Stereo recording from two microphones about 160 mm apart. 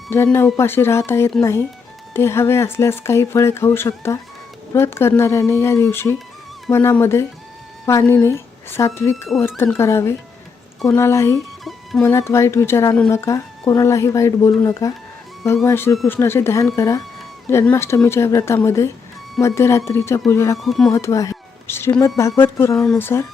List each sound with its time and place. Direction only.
0.1 s a woman's voice: 15° left (ahead or behind)
11.6 s music: centre (ahead or behind)
12.0 s a woman's voice: 15° left (ahead or behind)
20.6 s speech: centre (ahead or behind)
20.9 s speech: 20° left (ahead or behind)